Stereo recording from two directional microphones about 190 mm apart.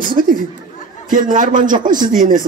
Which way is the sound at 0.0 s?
45° right (ahead or behind).